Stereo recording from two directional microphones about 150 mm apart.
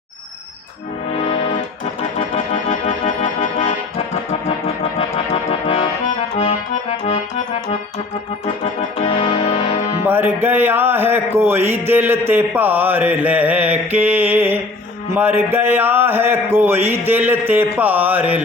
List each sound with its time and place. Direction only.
1.1 s music: 45° left (ahead or behind)
5.6 s accordion: 40° left (ahead or behind)
6.1 s accordion: 50° left (ahead or behind)
8.4 s music: 45° left (ahead or behind)
10.1 s mantra: 15° right (ahead or behind)
15.1 s a sound: 15° right (ahead or behind)